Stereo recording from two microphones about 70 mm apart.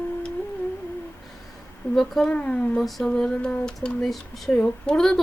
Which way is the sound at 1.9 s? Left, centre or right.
Centre.